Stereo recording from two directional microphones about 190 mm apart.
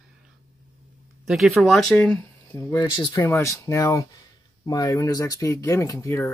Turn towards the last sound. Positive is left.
turn(degrees=15)  # may be behind; listen again after turning